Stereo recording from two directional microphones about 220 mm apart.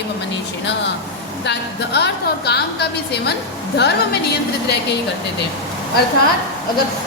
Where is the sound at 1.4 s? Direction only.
50° left (ahead or behind).